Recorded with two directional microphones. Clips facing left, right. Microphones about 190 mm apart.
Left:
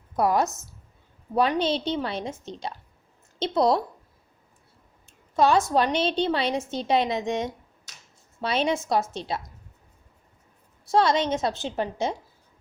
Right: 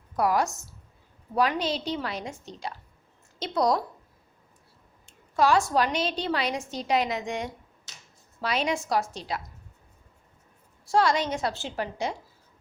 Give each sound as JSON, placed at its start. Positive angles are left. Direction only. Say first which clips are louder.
{"t": 0.2, "sound": "a woman's voice", "louder": "left 2 dB", "side_deg": 25}
{"t": 5.3, "sound": "a woman's voice", "louder": "left 2 dB", "side_deg": 20}
{"t": 10.8, "sound": "a woman's voice", "louder": "left 2 dB", "side_deg": 20}